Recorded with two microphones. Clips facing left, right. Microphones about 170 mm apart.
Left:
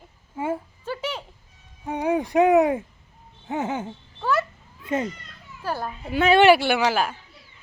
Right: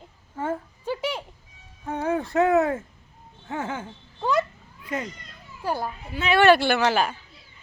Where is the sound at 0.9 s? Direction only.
10° right (ahead or behind).